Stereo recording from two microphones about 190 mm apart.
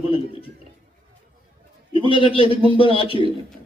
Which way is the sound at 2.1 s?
30° left (ahead or behind).